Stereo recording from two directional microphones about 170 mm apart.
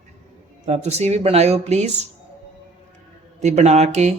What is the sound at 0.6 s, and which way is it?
Speech, 40° right (ahead or behind).